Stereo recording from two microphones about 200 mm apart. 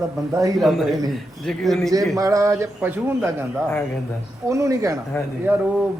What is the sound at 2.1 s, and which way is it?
Speech, 15° right (ahead or behind).